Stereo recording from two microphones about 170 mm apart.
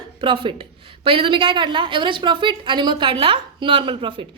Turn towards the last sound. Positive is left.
turn(degrees=-30)  # may be behind; listen again after turning